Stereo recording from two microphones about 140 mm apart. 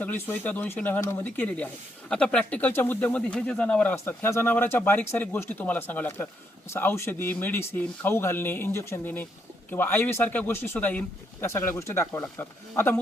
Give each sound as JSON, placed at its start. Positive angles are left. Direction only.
{"t": 0.0, "sound": "speech", "side_deg": 15}
{"t": 3.9, "sound": "speech", "side_deg": 20}